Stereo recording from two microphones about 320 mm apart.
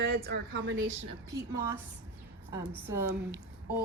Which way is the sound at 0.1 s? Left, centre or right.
Right.